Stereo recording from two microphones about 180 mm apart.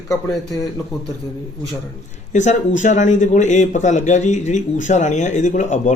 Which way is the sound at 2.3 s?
40° left (ahead or behind).